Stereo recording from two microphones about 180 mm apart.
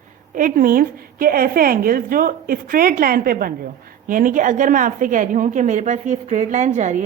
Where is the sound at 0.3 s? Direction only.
50° right (ahead or behind).